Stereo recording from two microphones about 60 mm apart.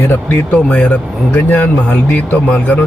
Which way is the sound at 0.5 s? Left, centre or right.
Centre.